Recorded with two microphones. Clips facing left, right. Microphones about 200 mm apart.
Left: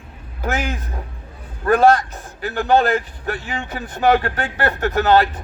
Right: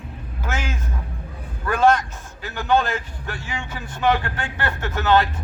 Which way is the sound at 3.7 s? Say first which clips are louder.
Left 5 dB; 35° left (ahead or behind).